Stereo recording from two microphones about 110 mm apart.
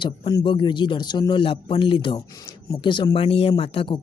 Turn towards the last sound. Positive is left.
turn(degrees=55)  # may be behind; listen again after turning